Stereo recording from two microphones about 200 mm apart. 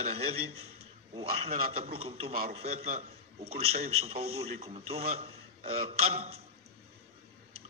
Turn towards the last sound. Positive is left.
turn(degrees=-30)  # may be behind; listen again after turning